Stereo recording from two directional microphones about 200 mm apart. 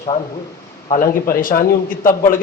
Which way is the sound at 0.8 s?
40° left (ahead or behind).